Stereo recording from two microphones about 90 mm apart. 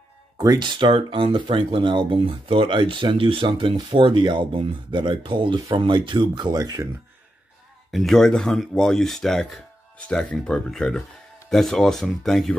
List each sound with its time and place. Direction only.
0.6 s speech: 60° right (ahead or behind); by 6.9 s 45° right (ahead or behind)
7.9 s speech: 5° left (ahead or behind)